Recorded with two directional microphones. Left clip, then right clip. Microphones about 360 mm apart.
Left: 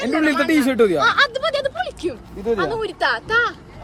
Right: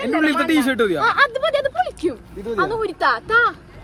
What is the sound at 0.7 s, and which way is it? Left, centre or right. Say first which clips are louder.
Speech: left 2 dB; centre.